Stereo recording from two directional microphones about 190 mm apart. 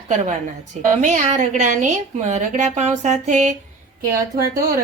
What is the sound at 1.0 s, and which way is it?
A woman's voice, 40° right (ahead or behind).